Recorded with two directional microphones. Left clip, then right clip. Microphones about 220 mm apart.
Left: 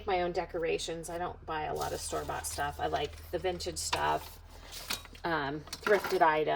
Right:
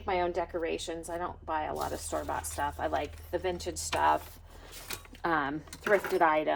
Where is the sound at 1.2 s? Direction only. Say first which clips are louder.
Right 3 dB; 5° right (ahead or behind).